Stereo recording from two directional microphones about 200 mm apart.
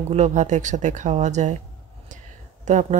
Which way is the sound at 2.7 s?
35° right (ahead or behind).